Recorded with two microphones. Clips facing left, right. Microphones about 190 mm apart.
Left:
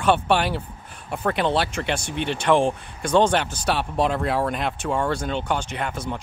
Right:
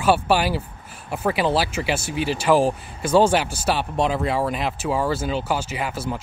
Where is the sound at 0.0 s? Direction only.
5° right (ahead or behind).